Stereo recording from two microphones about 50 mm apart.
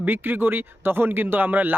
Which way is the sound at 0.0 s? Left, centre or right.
Right.